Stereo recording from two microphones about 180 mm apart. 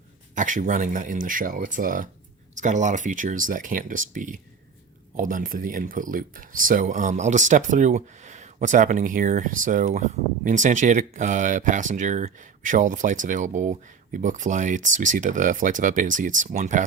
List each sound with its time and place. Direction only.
0.3 s speech: 45° right (ahead or behind)